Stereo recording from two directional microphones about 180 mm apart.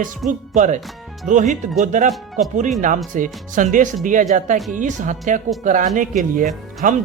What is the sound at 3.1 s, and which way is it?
A man's voice, 45° right (ahead or behind).